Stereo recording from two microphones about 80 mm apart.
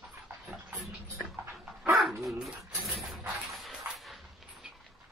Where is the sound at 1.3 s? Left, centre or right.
Right.